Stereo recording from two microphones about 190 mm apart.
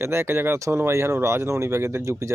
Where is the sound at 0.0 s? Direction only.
15° right (ahead or behind).